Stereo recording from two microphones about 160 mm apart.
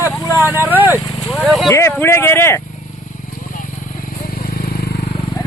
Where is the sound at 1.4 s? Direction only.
Centre (ahead or behind).